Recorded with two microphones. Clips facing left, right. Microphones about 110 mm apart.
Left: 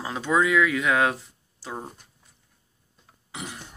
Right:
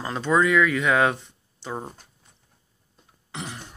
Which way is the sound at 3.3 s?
5° left (ahead or behind).